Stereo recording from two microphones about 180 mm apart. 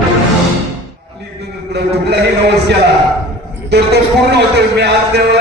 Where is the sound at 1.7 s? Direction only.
65° right (ahead or behind).